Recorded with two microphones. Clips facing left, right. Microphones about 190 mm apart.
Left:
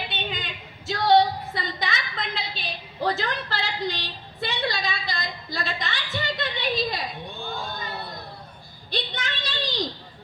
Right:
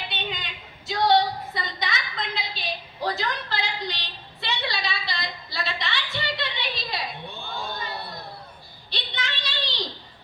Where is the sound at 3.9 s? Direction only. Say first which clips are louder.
Left 5 dB; 50° left (ahead or behind).